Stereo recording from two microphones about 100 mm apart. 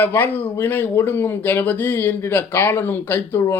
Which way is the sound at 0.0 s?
20° left (ahead or behind).